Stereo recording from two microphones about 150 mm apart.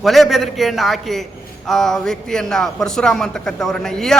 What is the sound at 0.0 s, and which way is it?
A man's voice, centre (ahead or behind).